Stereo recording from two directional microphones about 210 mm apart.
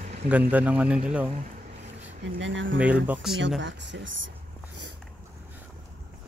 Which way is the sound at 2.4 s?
60° right (ahead or behind).